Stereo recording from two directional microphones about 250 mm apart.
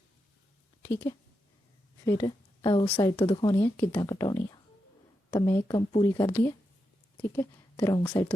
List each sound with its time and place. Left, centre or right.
2.0 s a woman's voice: centre